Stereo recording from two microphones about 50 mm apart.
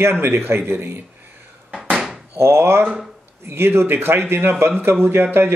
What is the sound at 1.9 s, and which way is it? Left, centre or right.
Door, centre.